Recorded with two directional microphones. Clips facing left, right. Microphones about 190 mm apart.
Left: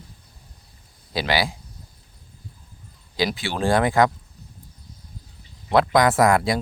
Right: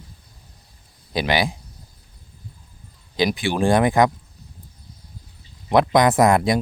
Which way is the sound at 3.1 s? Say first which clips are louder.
Right 4 dB; 15° right (ahead or behind).